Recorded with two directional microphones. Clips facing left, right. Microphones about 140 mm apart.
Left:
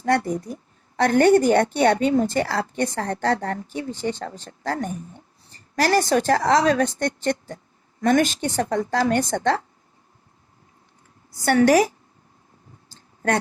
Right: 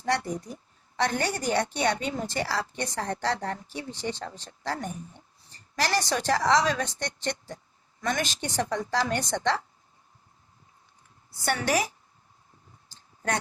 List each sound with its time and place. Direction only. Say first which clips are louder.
0.0 s a woman's voice: left 7 dB; 50° left (ahead or behind)
11.4 s a woman's voice: left 11 dB; 45° left (ahead or behind)
12.9 s a sound: left 7 dB; 50° left (ahead or behind)